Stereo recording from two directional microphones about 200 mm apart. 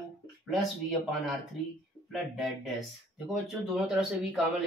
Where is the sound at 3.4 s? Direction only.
Centre (ahead or behind).